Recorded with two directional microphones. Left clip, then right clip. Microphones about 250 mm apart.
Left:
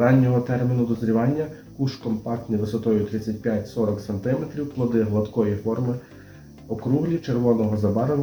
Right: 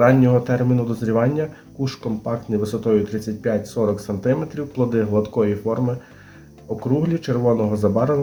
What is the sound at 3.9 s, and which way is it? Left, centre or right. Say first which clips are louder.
Speech: right 5 dB; right.